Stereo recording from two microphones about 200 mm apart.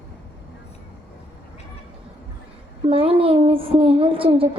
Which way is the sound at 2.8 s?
30° right (ahead or behind).